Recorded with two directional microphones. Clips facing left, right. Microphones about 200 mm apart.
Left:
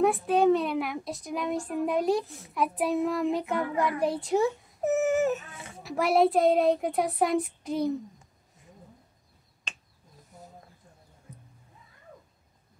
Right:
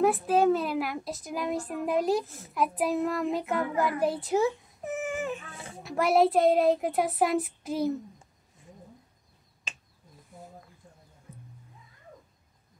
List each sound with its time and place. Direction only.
0.0 s a child's voice: centre (ahead or behind)
4.8 s baby cry: 40° left (ahead or behind)
5.8 s a child's voice: centre (ahead or behind)